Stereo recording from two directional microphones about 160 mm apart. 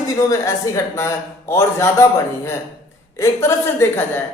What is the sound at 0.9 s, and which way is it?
A man's voice, 15° left (ahead or behind).